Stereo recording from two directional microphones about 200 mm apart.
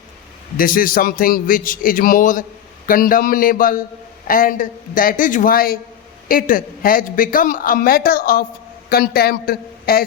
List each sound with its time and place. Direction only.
0.5 s a man's voice: 45° left (ahead or behind)